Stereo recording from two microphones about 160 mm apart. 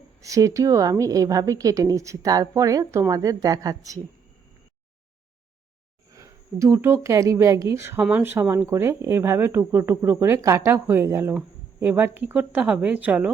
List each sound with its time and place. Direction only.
0.2 s a woman's voice: 20° right (ahead or behind)
6.1 s a woman's voice: 20° right (ahead or behind)